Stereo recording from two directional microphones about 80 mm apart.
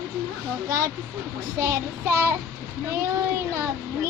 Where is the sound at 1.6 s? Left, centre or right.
Right.